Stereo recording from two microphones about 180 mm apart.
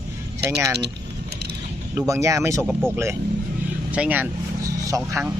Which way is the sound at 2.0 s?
15° right (ahead or behind).